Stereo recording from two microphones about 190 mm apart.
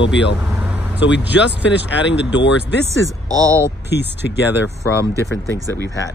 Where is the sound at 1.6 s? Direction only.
70° left (ahead or behind).